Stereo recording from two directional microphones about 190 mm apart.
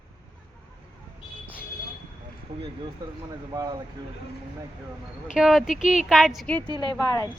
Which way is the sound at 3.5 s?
20° right (ahead or behind).